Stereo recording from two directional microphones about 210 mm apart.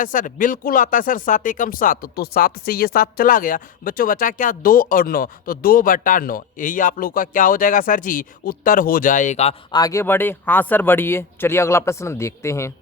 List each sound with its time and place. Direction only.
0.0 s speech: 40° left (ahead or behind)
9.7 s speech: 15° left (ahead or behind)